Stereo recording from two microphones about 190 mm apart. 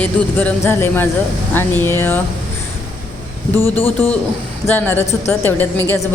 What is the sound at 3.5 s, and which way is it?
Speech, 20° right (ahead or behind).